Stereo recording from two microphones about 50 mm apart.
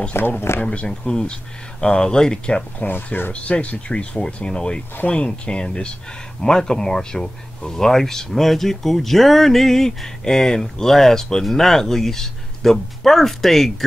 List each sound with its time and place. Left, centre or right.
0.1 s speech: left
0.7 s speech: centre
2.9 s speech: left
3.3 s speech: left; by 13.8 s centre